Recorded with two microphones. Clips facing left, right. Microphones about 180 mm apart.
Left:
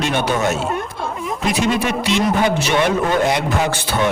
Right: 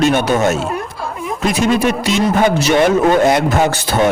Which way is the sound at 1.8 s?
45° right (ahead or behind).